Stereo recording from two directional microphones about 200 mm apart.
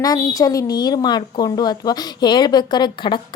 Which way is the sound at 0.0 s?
20° left (ahead or behind).